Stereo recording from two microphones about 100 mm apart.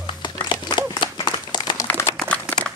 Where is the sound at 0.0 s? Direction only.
50° left (ahead or behind).